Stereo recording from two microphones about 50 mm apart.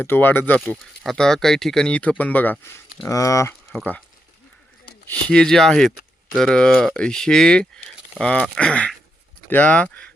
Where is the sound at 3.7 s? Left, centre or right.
Left.